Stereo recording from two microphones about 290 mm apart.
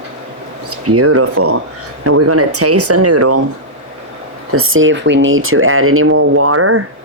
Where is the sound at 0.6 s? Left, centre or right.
Right.